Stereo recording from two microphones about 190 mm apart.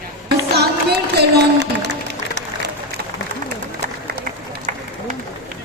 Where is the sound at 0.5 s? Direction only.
60° right (ahead or behind).